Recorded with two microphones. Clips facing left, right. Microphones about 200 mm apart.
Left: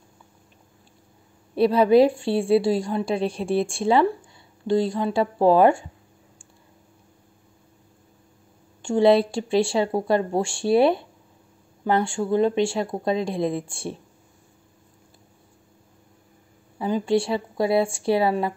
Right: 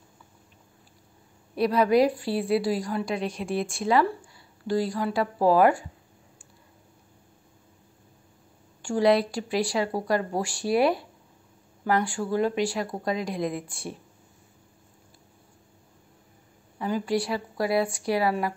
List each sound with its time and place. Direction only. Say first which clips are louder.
1.5 s a woman's voice: left 5 dB; 30° left (ahead or behind)
8.8 s a woman's voice: left 4 dB; 25° left (ahead or behind)
16.7 s a woman's voice: left 5 dB; 25° left (ahead or behind)